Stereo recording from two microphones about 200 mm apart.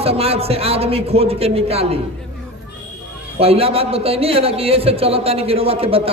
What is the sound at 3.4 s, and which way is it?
A man's voice, 30° right (ahead or behind).